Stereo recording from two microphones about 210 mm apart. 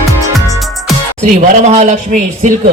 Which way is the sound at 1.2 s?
35° right (ahead or behind).